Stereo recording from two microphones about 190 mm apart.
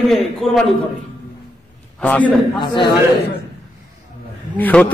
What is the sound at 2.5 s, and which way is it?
Speech, 25° left (ahead or behind).